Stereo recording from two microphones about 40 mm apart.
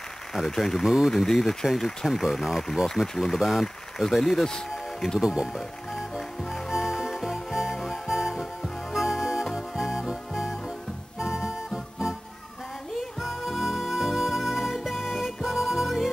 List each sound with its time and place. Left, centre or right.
0.6 s speech: centre
0.8 s speech: centre
1.1 s speech: centre
4.2 s speech: centre
5.2 s speech: centre
5.9 s music: centre
13.2 s music: centre